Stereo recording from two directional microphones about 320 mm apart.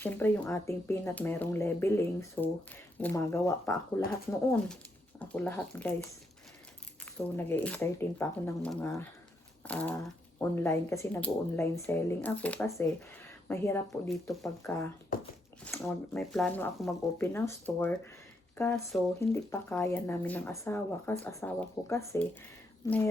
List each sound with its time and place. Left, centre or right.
0.0 s speech: centre
7.3 s speech: centre
15.1 s speech: left
15.6 s speech: centre